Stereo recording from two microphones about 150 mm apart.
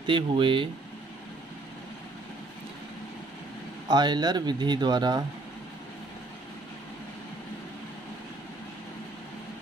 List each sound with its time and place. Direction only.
0.0 s speech: 35° right (ahead or behind)
3.9 s speech: 30° right (ahead or behind)